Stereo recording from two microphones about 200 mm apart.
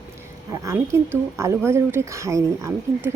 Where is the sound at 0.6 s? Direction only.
15° right (ahead or behind).